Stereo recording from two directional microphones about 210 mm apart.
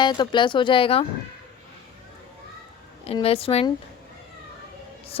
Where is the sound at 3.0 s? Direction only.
30° left (ahead or behind).